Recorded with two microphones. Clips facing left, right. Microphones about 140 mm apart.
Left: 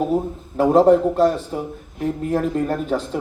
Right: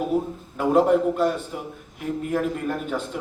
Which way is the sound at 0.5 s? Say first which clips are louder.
Left 5 dB; 35° left (ahead or behind).